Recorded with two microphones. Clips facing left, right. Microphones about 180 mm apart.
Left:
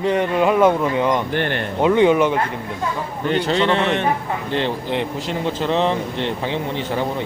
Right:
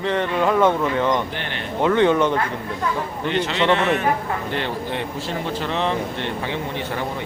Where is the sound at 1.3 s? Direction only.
50° left (ahead or behind).